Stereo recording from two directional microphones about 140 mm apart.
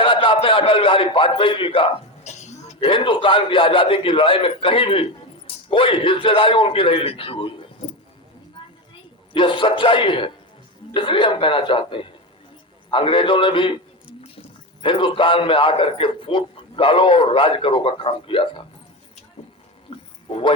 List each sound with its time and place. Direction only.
0.0 s a man's voice: 35° left (ahead or behind)
2.2 s a sound: 55° left (ahead or behind)
2.8 s a man's voice: 35° left (ahead or behind)
9.3 s a man's voice: 35° left (ahead or behind)
14.8 s a man's voice: 35° left (ahead or behind)
19.9 s wild animals: 40° left (ahead or behind)
20.2 s speech: 40° left (ahead or behind)